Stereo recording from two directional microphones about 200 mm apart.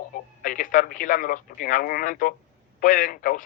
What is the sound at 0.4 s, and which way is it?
Speech, 45° left (ahead or behind).